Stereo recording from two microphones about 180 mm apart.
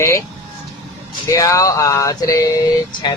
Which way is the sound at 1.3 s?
20° left (ahead or behind).